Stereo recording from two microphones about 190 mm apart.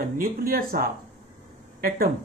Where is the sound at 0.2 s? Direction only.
50° right (ahead or behind).